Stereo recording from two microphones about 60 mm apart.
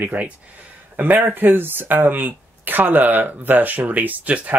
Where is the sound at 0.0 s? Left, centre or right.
Right.